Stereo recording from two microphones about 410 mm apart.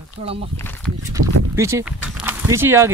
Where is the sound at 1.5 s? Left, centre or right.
Centre.